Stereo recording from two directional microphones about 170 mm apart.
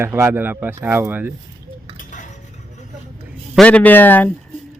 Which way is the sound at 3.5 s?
5° left (ahead or behind).